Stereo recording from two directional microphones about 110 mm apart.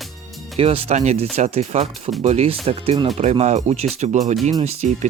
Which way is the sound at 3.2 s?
85° right.